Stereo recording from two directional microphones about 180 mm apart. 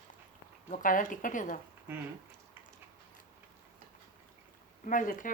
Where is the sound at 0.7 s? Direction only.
45° left (ahead or behind).